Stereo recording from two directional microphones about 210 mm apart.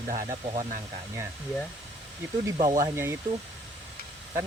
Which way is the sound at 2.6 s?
15° right (ahead or behind).